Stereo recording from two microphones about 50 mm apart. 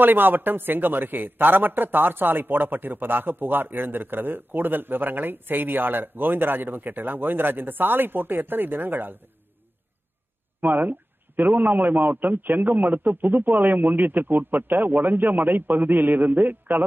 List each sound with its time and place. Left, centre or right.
0.0 s a man's voice: right
10.6 s a man's voice: right